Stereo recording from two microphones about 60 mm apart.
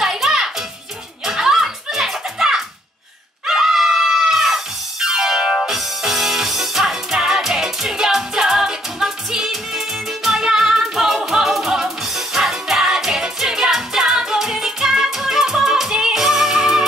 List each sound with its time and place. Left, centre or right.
0.0 s music: centre
3.4 s screaming: centre
5.0 s music: centre